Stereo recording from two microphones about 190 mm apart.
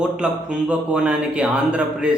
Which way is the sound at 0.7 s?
5° right (ahead or behind).